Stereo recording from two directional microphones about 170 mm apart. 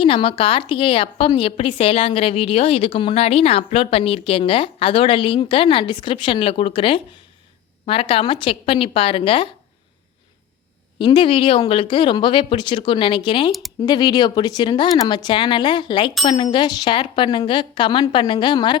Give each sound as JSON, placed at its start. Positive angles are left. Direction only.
{"t": 0.0, "sound": "a woman's voice", "side_deg": 35}
{"t": 10.9, "sound": "speech", "side_deg": 30}